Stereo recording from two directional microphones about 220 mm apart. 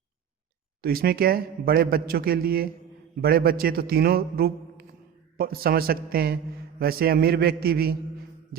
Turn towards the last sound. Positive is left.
turn(degrees=-45)  # may be behind; listen again after turning